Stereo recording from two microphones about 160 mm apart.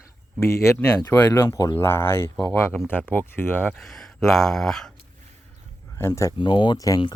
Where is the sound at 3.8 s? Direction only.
Centre (ahead or behind).